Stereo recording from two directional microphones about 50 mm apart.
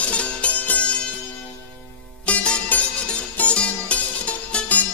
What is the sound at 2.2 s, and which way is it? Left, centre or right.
Music, left.